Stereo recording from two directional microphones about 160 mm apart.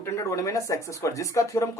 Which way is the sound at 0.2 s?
20° left (ahead or behind).